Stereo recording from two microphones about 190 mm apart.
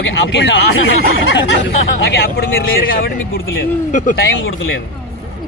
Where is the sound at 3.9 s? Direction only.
45° left (ahead or behind).